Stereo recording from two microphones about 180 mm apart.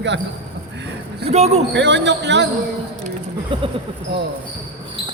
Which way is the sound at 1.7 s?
80° right.